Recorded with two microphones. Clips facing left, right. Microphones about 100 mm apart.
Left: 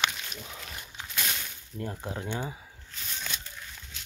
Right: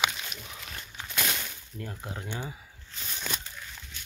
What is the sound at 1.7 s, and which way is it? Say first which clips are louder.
Speech: left 4 dB; 25° left (ahead or behind).